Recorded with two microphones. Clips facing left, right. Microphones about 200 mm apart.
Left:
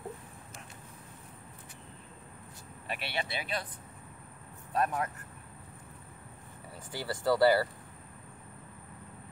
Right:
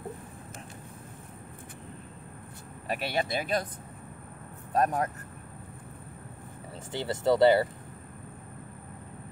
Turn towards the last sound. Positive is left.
turn(degrees=-20)  # may be behind; listen again after turning